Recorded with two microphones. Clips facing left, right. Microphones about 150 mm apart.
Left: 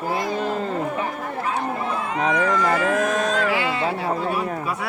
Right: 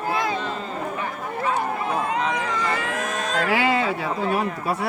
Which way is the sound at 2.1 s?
50° left (ahead or behind).